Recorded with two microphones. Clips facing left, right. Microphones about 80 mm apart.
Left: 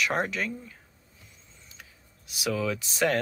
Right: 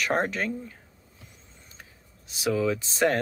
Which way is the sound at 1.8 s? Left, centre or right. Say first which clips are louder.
Right 1 dB; right.